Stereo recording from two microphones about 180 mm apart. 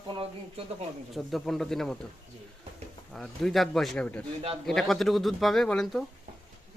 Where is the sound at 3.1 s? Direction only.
Centre (ahead or behind).